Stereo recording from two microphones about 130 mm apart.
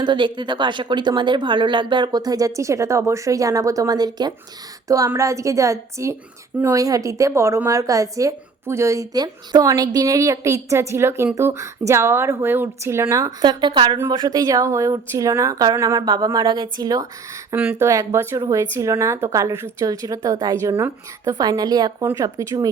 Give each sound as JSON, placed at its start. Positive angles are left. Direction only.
{"t": 0.0, "sound": "a woman's voice", "side_deg": -35}
{"t": 13.4, "sound": "a woman's voice", "side_deg": -35}
{"t": 17.5, "sound": "a woman's voice", "side_deg": -15}